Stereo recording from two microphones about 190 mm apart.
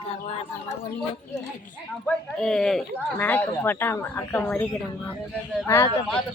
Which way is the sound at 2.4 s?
5° left (ahead or behind).